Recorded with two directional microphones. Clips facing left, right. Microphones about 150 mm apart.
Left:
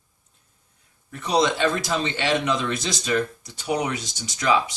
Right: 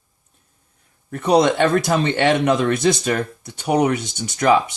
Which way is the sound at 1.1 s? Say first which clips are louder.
Right 6 dB; 55° right (ahead or behind).